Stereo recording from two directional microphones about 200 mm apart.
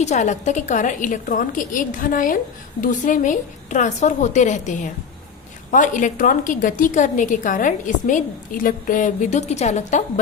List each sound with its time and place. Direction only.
0.0 s a woman's voice: 35° left (ahead or behind)